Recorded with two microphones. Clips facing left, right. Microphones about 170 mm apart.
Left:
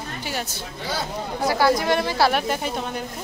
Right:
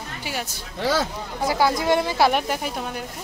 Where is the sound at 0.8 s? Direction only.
90° right.